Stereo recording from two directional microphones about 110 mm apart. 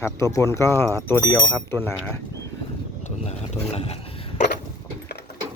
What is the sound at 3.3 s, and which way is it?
Speech, 75° left (ahead or behind).